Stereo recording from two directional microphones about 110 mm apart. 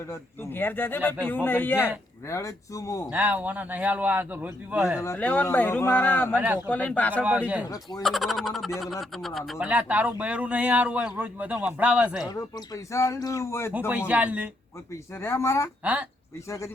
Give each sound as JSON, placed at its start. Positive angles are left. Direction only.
{"t": 0.1, "sound": "speech", "side_deg": 20}
{"t": 3.1, "sound": "a man's voice", "side_deg": -15}
{"t": 5.1, "sound": "speech", "side_deg": 15}
{"t": 6.3, "sound": "a man's voice", "side_deg": -15}
{"t": 6.7, "sound": "speech", "side_deg": 15}
{"t": 7.1, "sound": "a man's voice", "side_deg": -10}
{"t": 7.7, "sound": "speech", "side_deg": 30}
{"t": 8.0, "sound": "speech", "side_deg": 0}
{"t": 9.5, "sound": "a man's voice", "side_deg": -10}
{"t": 12.2, "sound": "speech", "side_deg": 35}
{"t": 13.7, "sound": "a man's voice", "side_deg": -15}
{"t": 15.1, "sound": "speech", "side_deg": 25}
{"t": 15.8, "sound": "speech", "side_deg": -10}